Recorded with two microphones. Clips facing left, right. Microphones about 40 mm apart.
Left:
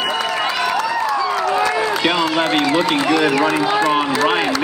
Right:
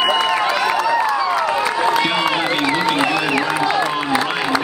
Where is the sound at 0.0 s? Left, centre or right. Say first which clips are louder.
Right 3 dB; centre.